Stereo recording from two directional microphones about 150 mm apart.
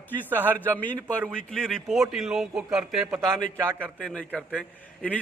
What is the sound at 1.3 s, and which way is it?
A man's voice, 5° left (ahead or behind).